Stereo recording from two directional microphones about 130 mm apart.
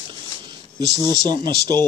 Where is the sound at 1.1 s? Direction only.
30° right (ahead or behind).